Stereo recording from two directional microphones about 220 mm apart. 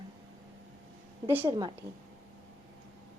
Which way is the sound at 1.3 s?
10° right (ahead or behind).